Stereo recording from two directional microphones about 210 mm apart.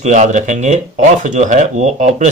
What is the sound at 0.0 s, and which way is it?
Speech, 35° right (ahead or behind).